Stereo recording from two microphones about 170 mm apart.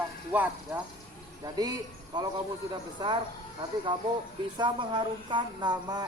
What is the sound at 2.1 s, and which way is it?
Speech, 25° right (ahead or behind).